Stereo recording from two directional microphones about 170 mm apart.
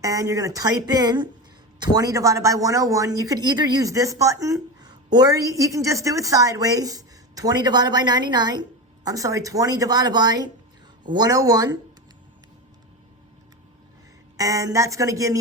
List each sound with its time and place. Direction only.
0.0 s a woman's voice: 20° right (ahead or behind)
14.3 s a woman's voice: 20° right (ahead or behind)